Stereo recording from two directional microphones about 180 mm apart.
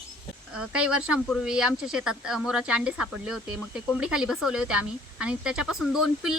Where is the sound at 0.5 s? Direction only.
5° right (ahead or behind).